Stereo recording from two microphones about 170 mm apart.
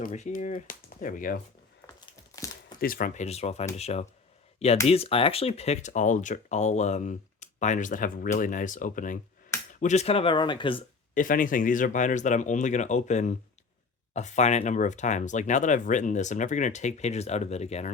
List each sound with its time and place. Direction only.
0.0 s speech: 45° left (ahead or behind)
2.3 s a sound: 20° left (ahead or behind)
2.8 s speech: 55° left (ahead or behind)
3.2 s speech: 40° left (ahead or behind)
11.1 s speech: 55° left (ahead or behind)